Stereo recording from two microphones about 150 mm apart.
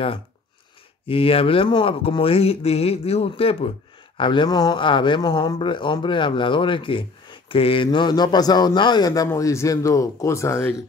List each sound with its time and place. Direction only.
1.0 s speech: 40° left (ahead or behind); by 10.8 s 15° left (ahead or behind)